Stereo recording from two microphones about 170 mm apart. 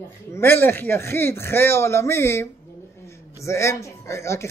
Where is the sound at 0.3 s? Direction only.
15° left (ahead or behind).